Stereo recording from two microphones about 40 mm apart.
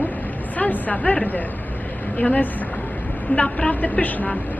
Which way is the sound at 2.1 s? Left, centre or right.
Left.